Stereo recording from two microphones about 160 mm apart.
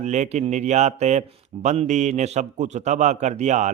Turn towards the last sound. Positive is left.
turn(degrees=-45)  # may be behind; listen again after turning